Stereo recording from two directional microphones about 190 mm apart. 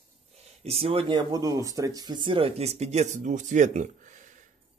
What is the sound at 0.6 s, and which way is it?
Speech, 30° right (ahead or behind).